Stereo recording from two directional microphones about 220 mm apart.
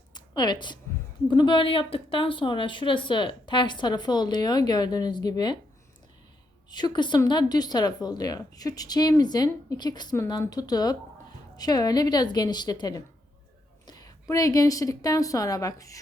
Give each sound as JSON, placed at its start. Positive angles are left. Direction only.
{"t": 0.1, "sound": "a sound", "side_deg": 20}
{"t": 1.3, "sound": "a woman's voice", "side_deg": 20}
{"t": 6.7, "sound": "a woman's voice", "side_deg": 20}